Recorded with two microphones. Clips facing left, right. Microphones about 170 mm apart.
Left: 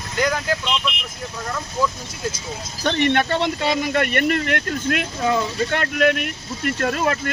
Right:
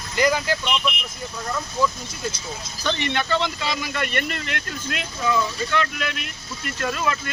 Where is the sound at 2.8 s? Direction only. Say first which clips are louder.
Left 6 dB; 55° left (ahead or behind).